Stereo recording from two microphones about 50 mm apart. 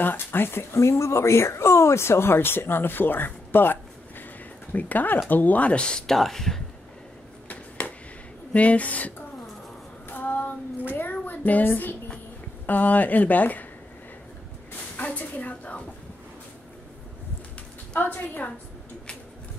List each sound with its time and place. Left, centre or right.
0.0 s speech: left
0.7 s speech: left; by 6.6 s centre
7.4 s a sound: left
8.5 s speech: left
10.0 s female singing: left
11.0 s child singing: left
12.6 s speech: left
15.0 s a sound: left
18.1 s speech: left